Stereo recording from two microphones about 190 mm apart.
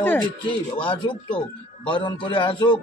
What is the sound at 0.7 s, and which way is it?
A man's voice, 25° left (ahead or behind).